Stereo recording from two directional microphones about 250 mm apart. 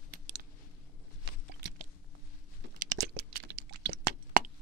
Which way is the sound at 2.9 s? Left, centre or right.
Right.